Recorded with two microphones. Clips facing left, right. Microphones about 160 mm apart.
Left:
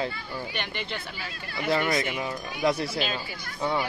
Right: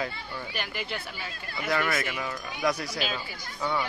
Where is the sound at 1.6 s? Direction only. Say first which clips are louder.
Left 3 dB; 25° left (ahead or behind).